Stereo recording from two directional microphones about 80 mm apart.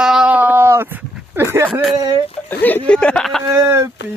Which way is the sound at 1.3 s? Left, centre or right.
Right.